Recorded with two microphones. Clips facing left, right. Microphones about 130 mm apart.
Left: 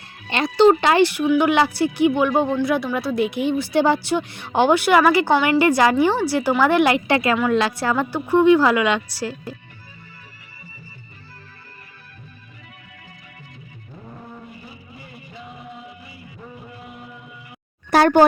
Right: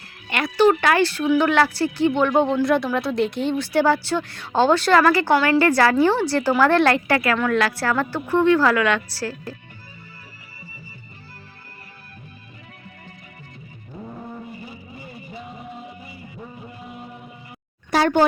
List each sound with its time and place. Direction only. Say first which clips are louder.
0.3 s speech: left 3 dB; 25° left (ahead or behind)
17.9 s speech: left 4 dB; 50° left (ahead or behind)